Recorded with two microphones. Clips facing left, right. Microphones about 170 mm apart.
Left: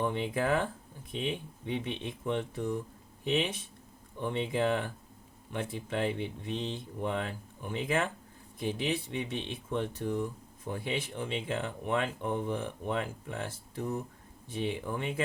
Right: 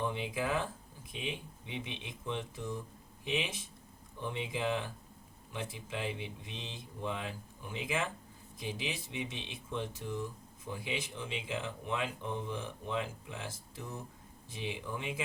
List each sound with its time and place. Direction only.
0.0 s speech: 60° left (ahead or behind)
1.8 s speech: 55° left (ahead or behind)